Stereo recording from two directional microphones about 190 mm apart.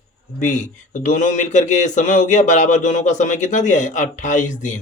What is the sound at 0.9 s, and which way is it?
A man's voice, 40° left (ahead or behind).